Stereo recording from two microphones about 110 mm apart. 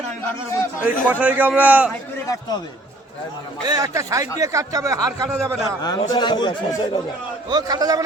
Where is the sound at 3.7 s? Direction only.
35° right (ahead or behind).